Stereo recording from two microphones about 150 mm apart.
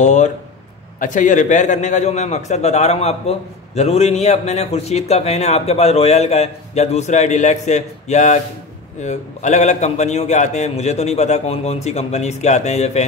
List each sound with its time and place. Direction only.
0.0 s a man's voice: 55° left (ahead or behind)